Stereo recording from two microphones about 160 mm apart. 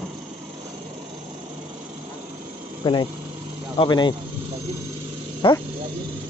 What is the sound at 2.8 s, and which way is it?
Speech, 30° left (ahead or behind).